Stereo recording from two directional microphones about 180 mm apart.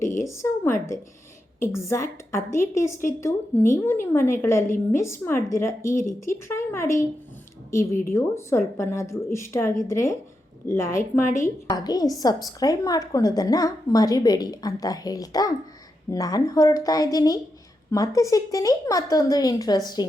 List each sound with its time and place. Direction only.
0.2 s a woman's voice: 15° left (ahead or behind)